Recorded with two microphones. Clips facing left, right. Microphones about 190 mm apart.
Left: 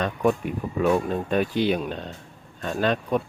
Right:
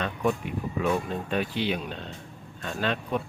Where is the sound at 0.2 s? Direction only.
45° left (ahead or behind).